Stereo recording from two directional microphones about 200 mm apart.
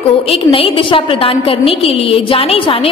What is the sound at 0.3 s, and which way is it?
A woman's voice, 25° left (ahead or behind).